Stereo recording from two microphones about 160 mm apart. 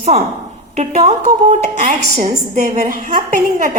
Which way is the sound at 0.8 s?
45° right (ahead or behind).